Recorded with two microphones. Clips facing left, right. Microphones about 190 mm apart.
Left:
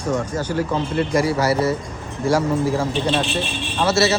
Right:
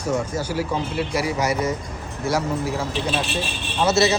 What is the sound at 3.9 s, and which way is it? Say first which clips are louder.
Speech: even; 20° right (ahead or behind).